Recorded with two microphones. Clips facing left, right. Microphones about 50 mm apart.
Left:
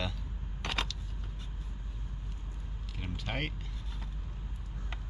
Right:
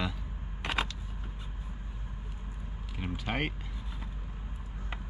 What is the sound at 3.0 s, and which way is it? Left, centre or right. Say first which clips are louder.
Speech: right 4 dB; centre.